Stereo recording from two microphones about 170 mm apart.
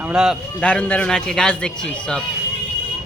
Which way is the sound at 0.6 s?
10° left (ahead or behind).